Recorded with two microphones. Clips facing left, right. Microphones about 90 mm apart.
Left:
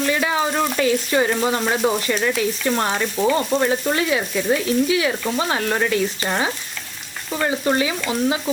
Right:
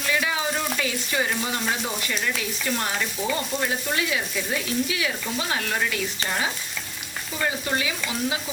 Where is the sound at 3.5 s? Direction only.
90° left.